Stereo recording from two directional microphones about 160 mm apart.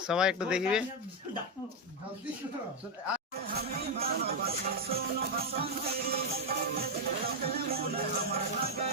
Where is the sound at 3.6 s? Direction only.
70° right (ahead or behind).